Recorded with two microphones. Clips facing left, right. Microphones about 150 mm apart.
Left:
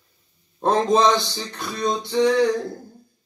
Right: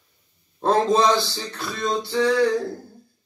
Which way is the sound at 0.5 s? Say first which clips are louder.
Even; 20° left (ahead or behind).